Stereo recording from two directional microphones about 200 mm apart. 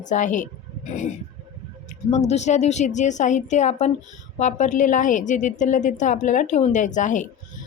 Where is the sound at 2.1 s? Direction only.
35° left (ahead or behind).